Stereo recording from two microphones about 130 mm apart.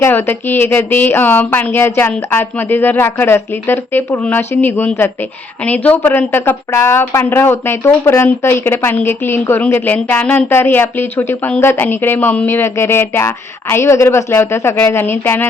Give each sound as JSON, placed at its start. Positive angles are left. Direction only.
{"t": 0.0, "sound": "speech", "side_deg": 15}